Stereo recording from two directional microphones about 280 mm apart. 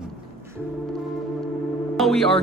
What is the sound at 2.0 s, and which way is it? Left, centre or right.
Speech, centre.